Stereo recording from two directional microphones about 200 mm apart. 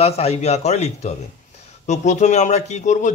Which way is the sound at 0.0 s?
30° left (ahead or behind).